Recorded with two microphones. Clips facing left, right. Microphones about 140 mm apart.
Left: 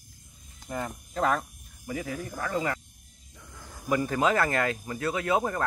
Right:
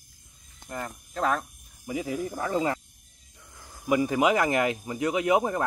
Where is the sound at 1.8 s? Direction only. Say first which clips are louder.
Right 4 dB; 20° right (ahead or behind).